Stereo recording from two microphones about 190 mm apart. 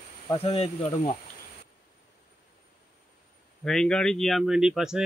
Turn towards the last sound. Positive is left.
turn(degrees=-5)  # may be behind; listen again after turning